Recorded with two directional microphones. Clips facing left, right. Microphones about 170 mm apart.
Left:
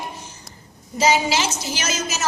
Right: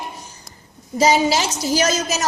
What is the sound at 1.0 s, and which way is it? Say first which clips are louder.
A woman's voice: right 3 dB; 40° right (ahead or behind).